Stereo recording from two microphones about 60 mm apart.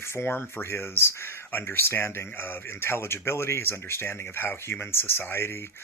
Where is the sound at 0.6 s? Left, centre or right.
Left.